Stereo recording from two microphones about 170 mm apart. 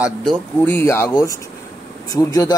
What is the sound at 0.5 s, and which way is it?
Speech, 10° left (ahead or behind).